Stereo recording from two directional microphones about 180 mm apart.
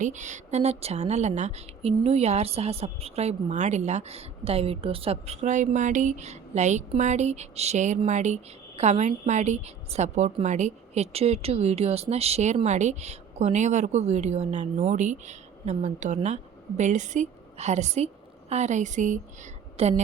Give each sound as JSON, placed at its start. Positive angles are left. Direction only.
{"t": 0.0, "sound": "a woman's voice", "side_deg": -40}